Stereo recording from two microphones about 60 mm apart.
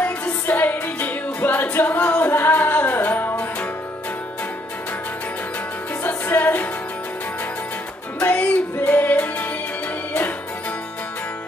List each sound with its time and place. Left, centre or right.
0.0 s music: left
6.0 s music: left
8.2 s music: left